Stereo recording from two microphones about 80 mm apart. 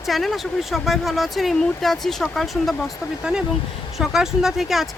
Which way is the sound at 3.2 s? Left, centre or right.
Centre.